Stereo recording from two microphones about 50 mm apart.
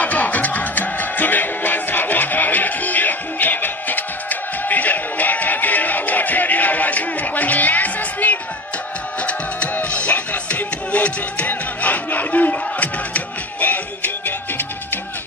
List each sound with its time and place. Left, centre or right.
0.0 s music: left
9.8 s music: left